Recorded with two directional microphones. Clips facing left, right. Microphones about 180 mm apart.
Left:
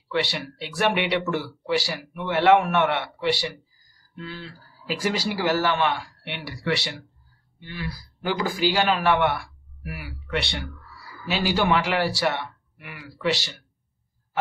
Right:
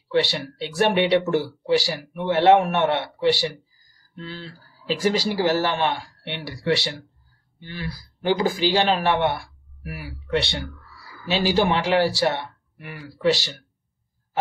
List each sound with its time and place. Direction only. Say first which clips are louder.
0.1 s speech: right 4 dB; 30° right (ahead or behind)